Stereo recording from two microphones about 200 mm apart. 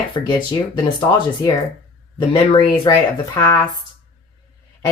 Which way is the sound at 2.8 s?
15° left (ahead or behind).